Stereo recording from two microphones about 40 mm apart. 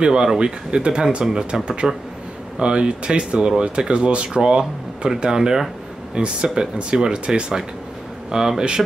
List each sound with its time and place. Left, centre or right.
0.0 s speech: centre